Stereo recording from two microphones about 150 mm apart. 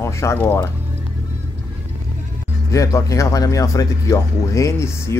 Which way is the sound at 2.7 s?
20° left (ahead or behind).